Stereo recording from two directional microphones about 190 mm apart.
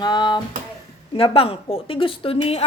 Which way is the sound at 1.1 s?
30° left (ahead or behind).